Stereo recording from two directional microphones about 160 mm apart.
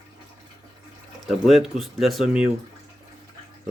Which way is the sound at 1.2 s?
Centre (ahead or behind).